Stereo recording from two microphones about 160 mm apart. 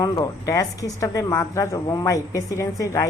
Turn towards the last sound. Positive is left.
turn(degrees=20)  # may be behind; listen again after turning